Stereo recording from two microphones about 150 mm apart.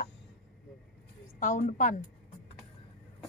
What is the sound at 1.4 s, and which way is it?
Speech, 60° left (ahead or behind).